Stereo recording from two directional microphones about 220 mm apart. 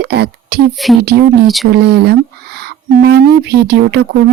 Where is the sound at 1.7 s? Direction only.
45° right (ahead or behind).